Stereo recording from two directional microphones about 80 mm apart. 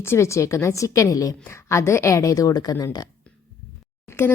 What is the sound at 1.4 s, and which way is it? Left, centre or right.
A woman's voice, left.